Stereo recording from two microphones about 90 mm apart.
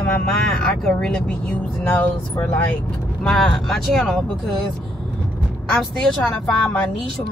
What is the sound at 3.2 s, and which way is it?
Speech, 5° left (ahead or behind).